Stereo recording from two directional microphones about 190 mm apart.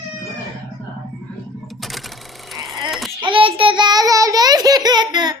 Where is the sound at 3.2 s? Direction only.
25° right (ahead or behind).